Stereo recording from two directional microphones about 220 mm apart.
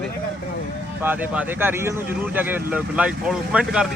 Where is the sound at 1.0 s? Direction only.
10° right (ahead or behind).